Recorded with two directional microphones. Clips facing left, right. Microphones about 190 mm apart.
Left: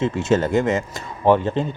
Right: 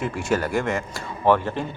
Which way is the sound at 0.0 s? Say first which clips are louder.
Left 5 dB; 20° left (ahead or behind).